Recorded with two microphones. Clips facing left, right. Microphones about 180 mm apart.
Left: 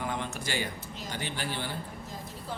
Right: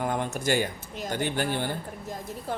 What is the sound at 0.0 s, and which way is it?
Speech, 50° right (ahead or behind).